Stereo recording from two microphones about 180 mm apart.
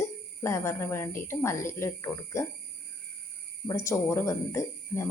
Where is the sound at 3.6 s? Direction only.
15° left (ahead or behind).